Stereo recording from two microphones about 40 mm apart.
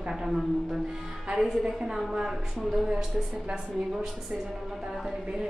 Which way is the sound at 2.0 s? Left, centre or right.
Centre.